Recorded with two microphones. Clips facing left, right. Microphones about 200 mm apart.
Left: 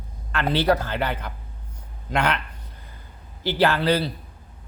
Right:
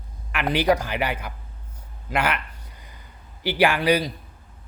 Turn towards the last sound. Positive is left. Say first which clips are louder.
# right 1 dB
turn(degrees=-15)  # may be behind; listen again after turning